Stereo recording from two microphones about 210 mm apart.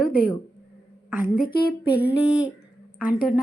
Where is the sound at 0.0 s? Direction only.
45° left (ahead or behind).